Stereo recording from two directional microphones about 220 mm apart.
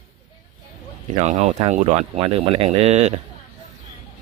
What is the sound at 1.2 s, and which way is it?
Speech, 30° right (ahead or behind).